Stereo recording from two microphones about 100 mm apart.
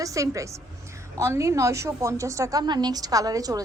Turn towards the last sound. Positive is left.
turn(degrees=-35)  # may be behind; listen again after turning